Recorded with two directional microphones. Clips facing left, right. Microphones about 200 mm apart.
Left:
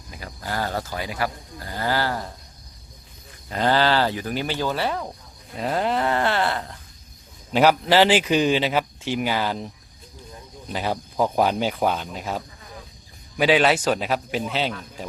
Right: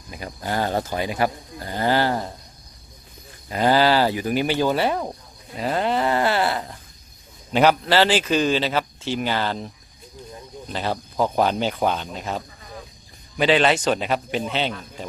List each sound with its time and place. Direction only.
0.1 s speech: 20° right (ahead or behind)
3.5 s speech: 10° right (ahead or behind)
5.5 s a man's voice: centre (ahead or behind)
7.5 s a man's voice: 5° left (ahead or behind)